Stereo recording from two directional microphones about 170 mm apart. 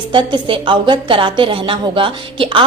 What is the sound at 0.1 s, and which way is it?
A woman's voice, 25° right (ahead or behind).